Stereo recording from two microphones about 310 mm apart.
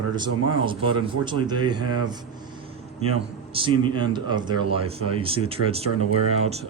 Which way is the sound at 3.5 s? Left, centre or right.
Centre.